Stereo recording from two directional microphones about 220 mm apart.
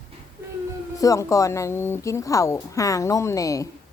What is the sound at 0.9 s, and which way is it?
A woman's voice, 15° left (ahead or behind).